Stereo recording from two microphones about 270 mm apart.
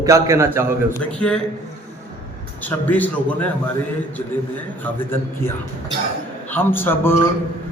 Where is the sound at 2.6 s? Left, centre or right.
Centre.